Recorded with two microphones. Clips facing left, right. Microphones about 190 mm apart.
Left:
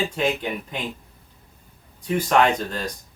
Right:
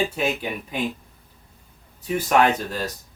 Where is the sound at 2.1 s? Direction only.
5° right (ahead or behind).